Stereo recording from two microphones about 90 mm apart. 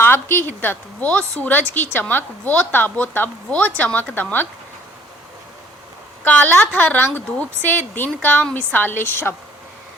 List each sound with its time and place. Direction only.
0.0 s a woman's voice: 25° left (ahead or behind)
6.2 s a woman's voice: 15° left (ahead or behind)